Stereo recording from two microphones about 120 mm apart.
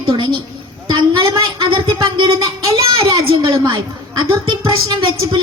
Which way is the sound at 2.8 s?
50° right (ahead or behind).